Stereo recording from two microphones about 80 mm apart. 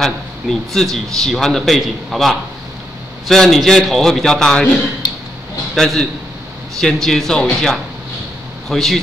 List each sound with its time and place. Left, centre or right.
0.0 s a man's voice: centre
5.0 s a sound: left
5.8 s a man's voice: centre